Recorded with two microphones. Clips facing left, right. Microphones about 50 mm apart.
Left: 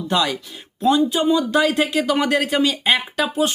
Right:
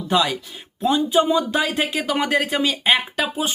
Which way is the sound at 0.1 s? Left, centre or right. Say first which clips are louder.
Right 1 dB; centre.